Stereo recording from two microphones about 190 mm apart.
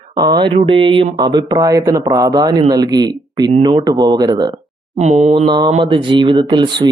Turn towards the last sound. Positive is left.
turn(degrees=-25)  # may be behind; listen again after turning